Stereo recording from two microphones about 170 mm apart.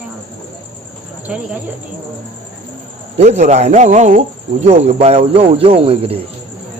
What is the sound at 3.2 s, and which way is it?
Speech, 40° right (ahead or behind).